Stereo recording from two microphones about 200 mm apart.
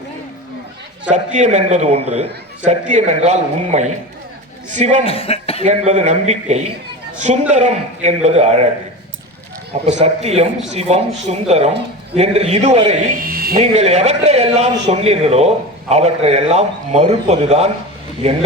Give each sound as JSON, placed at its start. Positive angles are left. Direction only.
{"t": 1.1, "sound": "a man's voice", "side_deg": -35}
{"t": 5.0, "sound": "a man's voice", "side_deg": 30}
{"t": 5.6, "sound": "a man's voice", "side_deg": -35}
{"t": 9.8, "sound": "a man's voice", "side_deg": -35}
{"t": 13.1, "sound": "a sound", "side_deg": -45}
{"t": 13.6, "sound": "a man's voice", "side_deg": -35}